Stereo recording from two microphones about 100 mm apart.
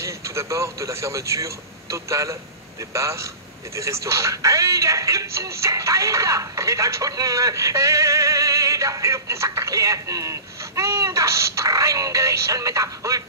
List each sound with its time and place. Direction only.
0.0 s speech: 30° right (ahead or behind)